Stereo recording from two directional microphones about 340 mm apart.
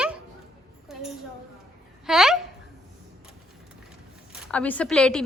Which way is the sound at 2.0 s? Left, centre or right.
Centre.